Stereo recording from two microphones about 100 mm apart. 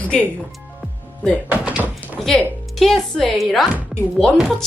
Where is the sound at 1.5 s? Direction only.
15° right (ahead or behind).